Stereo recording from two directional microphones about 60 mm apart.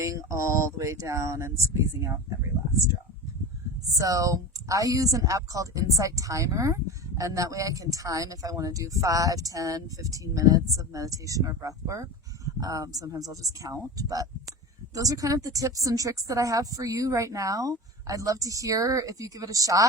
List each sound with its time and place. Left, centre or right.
0.0 s speech: right
3.9 s speech: right
12.5 s speech: right